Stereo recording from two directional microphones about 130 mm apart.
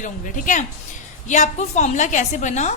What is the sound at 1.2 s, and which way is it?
A woman's voice, 65° left (ahead or behind).